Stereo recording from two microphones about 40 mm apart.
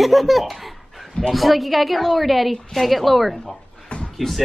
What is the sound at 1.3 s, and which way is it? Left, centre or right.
A woman's voice, centre.